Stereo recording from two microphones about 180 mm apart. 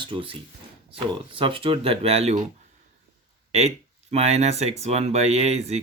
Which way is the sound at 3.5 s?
35° right (ahead or behind).